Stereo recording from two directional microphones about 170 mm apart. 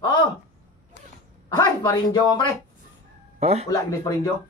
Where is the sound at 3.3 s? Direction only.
40° right (ahead or behind).